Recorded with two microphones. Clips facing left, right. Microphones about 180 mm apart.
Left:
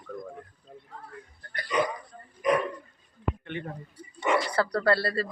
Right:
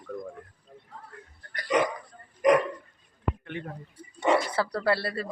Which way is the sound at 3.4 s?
Centre (ahead or behind).